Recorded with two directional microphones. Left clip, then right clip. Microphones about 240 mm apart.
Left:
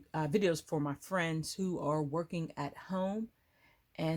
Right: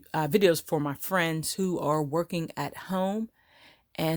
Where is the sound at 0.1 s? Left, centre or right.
Right.